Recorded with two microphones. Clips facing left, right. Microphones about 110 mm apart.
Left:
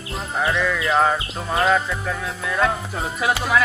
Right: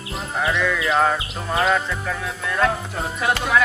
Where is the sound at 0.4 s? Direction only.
5° left (ahead or behind).